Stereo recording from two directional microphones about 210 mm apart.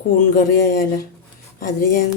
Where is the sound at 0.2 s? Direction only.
40° left (ahead or behind).